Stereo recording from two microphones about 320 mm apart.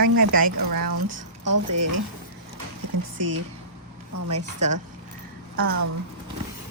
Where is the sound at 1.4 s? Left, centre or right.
Right.